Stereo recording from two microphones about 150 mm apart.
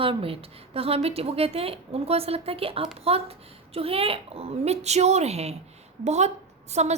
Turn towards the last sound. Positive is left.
turn(degrees=-45)  # may be behind; listen again after turning